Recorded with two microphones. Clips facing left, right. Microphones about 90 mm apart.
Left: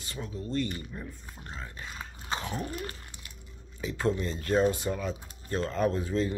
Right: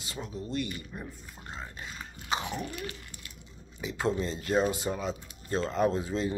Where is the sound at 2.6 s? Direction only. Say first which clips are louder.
Left 1 dB; 40° left (ahead or behind).